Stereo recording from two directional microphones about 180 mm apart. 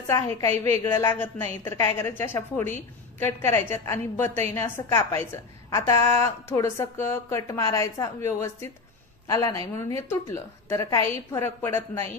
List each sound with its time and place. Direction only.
0.0 s a woman's voice: 15° left (ahead or behind)